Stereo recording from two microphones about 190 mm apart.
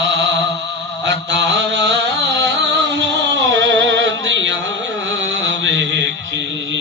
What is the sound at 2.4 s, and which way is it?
Music, 65° right (ahead or behind).